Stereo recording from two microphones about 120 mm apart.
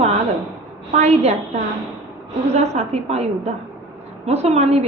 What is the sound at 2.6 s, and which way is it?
A woman's voice, 65° right (ahead or behind).